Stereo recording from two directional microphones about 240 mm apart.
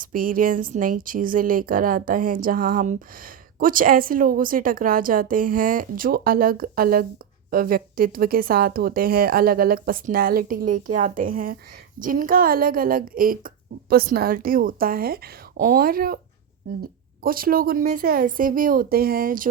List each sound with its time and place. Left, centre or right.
0.0 s speech: right
17.2 s speech: right